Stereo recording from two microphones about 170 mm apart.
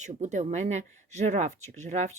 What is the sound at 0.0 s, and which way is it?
Speech, 45° right (ahead or behind).